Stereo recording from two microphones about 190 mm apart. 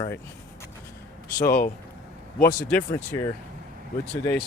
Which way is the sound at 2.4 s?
50° left (ahead or behind).